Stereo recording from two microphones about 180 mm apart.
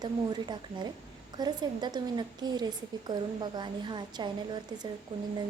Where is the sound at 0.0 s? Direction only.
25° right (ahead or behind).